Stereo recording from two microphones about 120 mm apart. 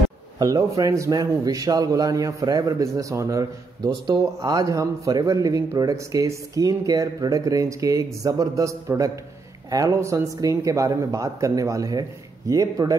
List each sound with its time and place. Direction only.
0.4 s a man's voice: 30° right (ahead or behind)